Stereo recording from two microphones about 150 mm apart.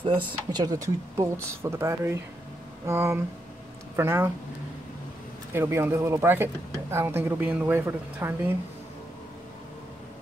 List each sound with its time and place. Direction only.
0.0 s speech: 30° right (ahead or behind); by 4.3 s 15° right (ahead or behind)
5.5 s speech: 15° right (ahead or behind)